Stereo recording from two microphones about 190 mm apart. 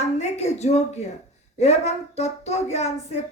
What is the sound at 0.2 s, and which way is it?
A woman's voice, 35° left (ahead or behind).